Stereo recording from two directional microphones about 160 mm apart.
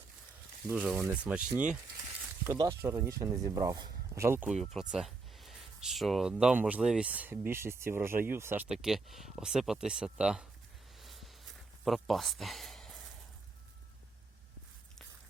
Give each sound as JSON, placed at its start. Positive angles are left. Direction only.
{"t": 0.7, "sound": "speech", "side_deg": -10}
{"t": 2.6, "sound": "speech", "side_deg": -20}
{"t": 4.4, "sound": "speech", "side_deg": 0}
{"t": 11.0, "sound": "a sound", "side_deg": 0}
{"t": 11.9, "sound": "speech", "side_deg": 0}